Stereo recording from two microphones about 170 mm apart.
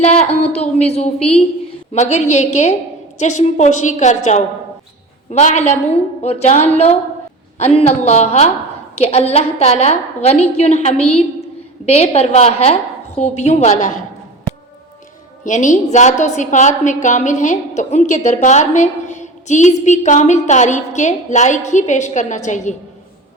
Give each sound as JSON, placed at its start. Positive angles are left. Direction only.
{"t": 0.0, "sound": "a woman's voice", "side_deg": 40}
{"t": 15.4, "sound": "a woman's voice", "side_deg": 45}